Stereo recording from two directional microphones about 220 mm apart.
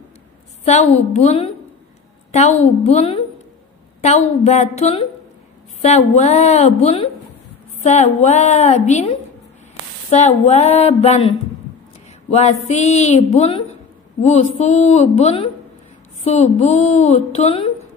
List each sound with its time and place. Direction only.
0.7 s a woman's voice: 30° left (ahead or behind)
2.6 s a woman's voice: 30° left (ahead or behind)